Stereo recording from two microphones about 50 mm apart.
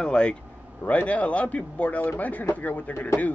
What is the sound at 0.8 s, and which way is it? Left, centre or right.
Speech, left.